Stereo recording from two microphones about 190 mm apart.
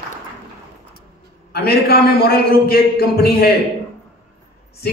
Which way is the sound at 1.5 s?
55° left (ahead or behind).